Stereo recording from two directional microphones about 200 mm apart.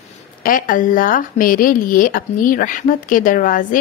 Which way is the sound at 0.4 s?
45° left (ahead or behind).